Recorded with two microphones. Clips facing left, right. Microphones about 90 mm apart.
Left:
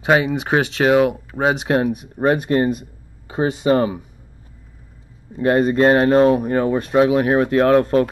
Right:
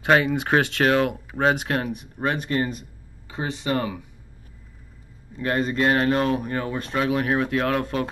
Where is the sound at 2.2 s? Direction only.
40° left (ahead or behind).